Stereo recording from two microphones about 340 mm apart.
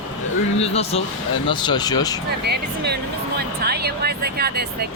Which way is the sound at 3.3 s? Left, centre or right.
Right.